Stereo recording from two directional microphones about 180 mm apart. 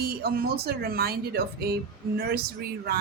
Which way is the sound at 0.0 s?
60° right (ahead or behind).